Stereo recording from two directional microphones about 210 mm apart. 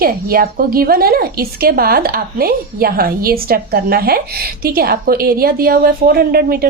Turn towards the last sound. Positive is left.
turn(degrees=-45)  # may be behind; listen again after turning